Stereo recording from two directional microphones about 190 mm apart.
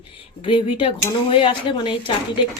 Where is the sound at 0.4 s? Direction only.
30° left (ahead or behind).